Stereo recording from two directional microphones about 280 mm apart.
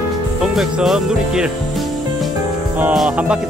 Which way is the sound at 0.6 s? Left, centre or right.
Centre.